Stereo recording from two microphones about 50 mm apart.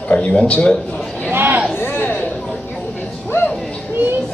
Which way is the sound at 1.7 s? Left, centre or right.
Left.